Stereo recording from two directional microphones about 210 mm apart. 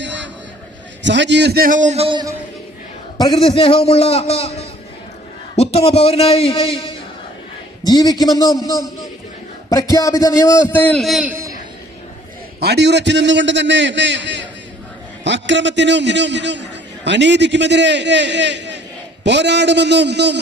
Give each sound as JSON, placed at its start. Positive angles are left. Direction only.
{"t": 0.0, "sound": "a sound", "side_deg": -60}
{"t": 1.0, "sound": "a man's voice", "side_deg": -60}
{"t": 3.2, "sound": "a man's voice", "side_deg": 20}
{"t": 12.5, "sound": "a man's voice", "side_deg": -50}